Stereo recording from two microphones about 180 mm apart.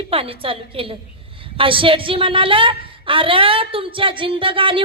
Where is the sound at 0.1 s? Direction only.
30° right (ahead or behind).